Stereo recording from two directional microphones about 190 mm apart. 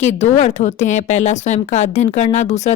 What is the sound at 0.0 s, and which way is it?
Speech, 40° left (ahead or behind).